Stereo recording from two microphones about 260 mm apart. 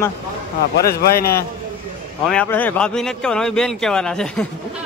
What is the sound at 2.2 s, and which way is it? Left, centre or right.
Speech, centre.